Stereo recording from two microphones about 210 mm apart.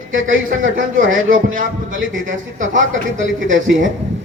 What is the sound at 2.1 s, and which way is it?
Speech, 65° right (ahead or behind).